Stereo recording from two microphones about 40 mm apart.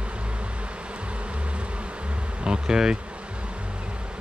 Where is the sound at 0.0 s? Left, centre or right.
Right.